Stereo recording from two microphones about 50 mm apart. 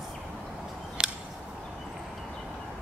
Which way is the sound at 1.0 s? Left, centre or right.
Right.